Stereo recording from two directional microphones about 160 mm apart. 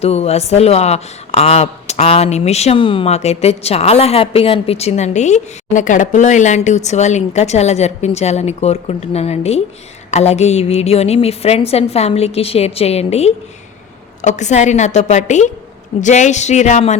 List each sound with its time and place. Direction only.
0.0 s a woman's voice: 40° left (ahead or behind)